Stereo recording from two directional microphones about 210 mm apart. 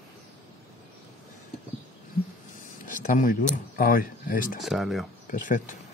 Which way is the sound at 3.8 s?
45° left (ahead or behind).